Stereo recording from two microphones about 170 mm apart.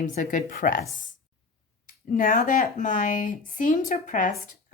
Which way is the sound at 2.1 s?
50° left (ahead or behind).